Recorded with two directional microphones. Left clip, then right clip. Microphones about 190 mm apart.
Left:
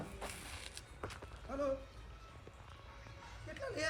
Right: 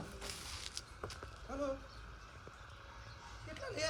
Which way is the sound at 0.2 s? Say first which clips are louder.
Right 1 dB; centre (ahead or behind).